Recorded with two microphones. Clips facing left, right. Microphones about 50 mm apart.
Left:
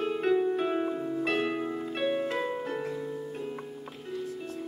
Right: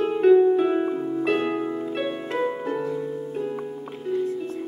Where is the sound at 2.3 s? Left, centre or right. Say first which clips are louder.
Right 6 dB; centre.